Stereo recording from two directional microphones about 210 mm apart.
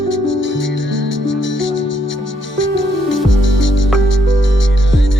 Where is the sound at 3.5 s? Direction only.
65° left (ahead or behind).